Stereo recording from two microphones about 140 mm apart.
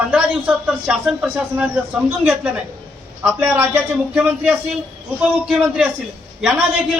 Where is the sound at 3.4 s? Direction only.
15° right (ahead or behind).